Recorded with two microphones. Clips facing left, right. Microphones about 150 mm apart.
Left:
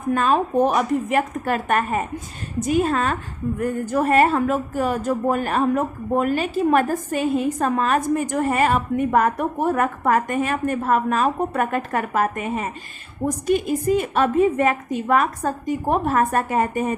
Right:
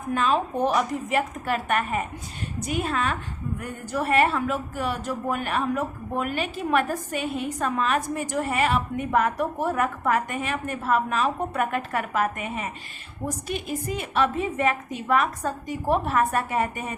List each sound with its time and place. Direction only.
0.1 s a woman's voice: 45° left (ahead or behind)